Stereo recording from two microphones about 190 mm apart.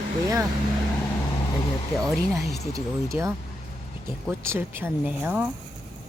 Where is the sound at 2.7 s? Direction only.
15° right (ahead or behind).